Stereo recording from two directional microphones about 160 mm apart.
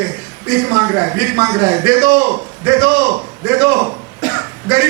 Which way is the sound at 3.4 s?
15° right (ahead or behind).